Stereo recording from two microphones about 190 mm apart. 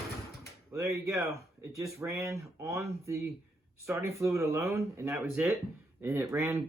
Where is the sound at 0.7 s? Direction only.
15° right (ahead or behind).